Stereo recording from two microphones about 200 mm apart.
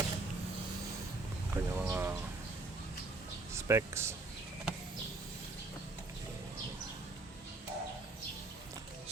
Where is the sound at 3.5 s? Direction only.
15° right (ahead or behind).